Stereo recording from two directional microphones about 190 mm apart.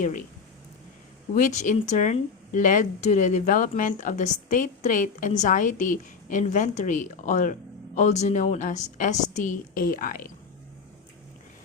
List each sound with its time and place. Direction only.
0.0 s speech: 45° left (ahead or behind)
1.4 s speech: 40° left (ahead or behind)